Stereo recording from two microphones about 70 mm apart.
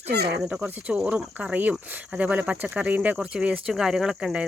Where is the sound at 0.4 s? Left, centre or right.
Centre.